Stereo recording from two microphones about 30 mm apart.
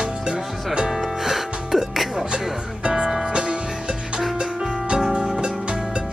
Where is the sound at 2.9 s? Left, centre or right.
Centre.